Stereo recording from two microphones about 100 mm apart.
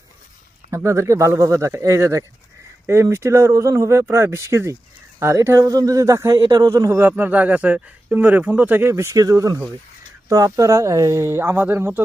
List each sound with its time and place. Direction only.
0.7 s speech: 30° right (ahead or behind)
7.1 s speech: 15° right (ahead or behind)